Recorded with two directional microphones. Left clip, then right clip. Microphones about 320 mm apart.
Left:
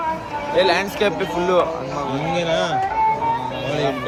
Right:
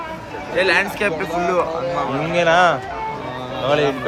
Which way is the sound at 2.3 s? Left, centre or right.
Right.